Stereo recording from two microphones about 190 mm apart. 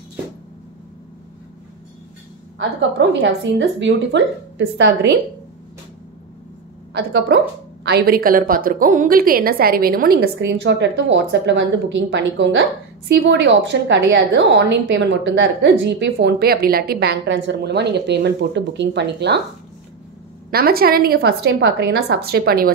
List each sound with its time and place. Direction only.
3.1 s a woman's voice: 70° right (ahead or behind)
6.9 s a woman's voice: 60° right (ahead or behind)
20.5 s a woman's voice: 50° right (ahead or behind)